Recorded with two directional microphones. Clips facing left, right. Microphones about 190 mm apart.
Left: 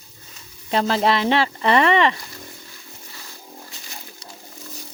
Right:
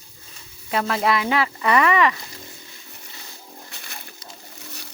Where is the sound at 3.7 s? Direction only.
60° right (ahead or behind).